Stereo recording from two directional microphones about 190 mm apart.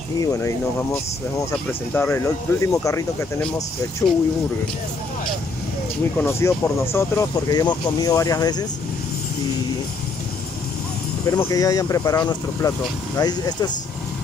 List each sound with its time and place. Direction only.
0.2 s speech: 15° left (ahead or behind)
1.5 s speech: 10° left (ahead or behind)
6.1 s speech: 10° left (ahead or behind)
11.3 s speech: 20° left (ahead or behind)